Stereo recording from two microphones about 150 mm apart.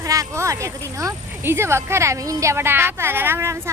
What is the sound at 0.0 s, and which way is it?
Speech, 20° right (ahead or behind).